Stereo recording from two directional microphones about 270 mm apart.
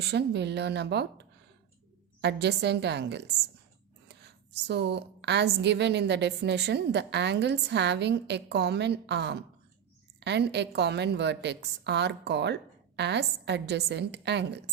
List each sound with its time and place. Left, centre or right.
0.1 s a woman's voice: right
4.6 s a woman's voice: right